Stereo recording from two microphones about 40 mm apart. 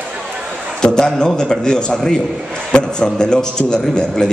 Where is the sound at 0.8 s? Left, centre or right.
Centre.